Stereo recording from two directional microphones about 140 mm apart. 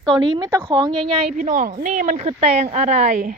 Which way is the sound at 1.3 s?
65° right (ahead or behind).